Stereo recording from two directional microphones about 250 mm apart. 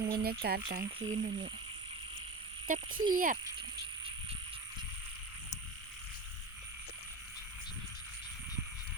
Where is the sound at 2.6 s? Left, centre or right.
Right.